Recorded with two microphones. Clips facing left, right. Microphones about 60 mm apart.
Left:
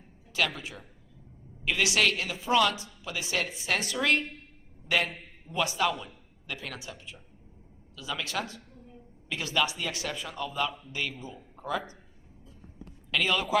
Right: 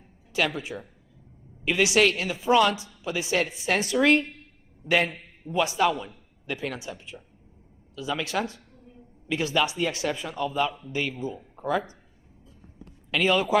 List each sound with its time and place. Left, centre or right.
0.3 s a man's voice: right
5.5 s a man's voice: right
13.1 s a man's voice: right